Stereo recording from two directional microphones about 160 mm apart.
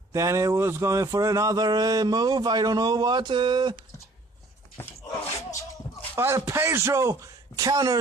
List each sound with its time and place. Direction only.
0.1 s speech: 20° right (ahead or behind)
6.1 s speech: 15° right (ahead or behind)